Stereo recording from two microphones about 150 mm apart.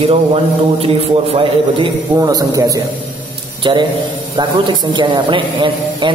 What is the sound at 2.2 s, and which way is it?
A man's voice, 25° right (ahead or behind).